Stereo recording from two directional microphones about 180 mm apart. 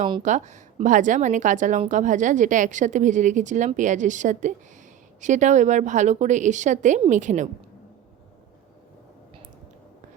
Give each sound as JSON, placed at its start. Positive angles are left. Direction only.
{"t": 0.2, "sound": "a woman's voice", "side_deg": -40}